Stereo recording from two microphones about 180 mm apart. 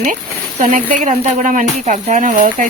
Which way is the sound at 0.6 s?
45° right (ahead or behind).